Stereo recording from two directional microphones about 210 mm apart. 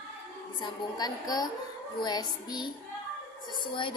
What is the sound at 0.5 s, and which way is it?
A woman's voice, 20° left (ahead or behind).